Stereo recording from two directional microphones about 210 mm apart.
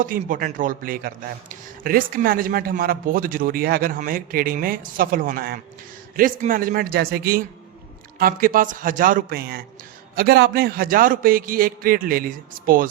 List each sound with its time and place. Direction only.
0.0 s a man's voice: 40° right (ahead or behind)